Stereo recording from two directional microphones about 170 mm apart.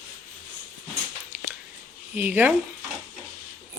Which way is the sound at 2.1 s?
10° right (ahead or behind).